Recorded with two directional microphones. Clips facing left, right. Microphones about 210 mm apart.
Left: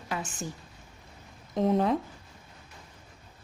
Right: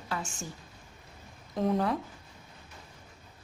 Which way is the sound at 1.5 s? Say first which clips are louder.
Left 3 dB; 20° left (ahead or behind).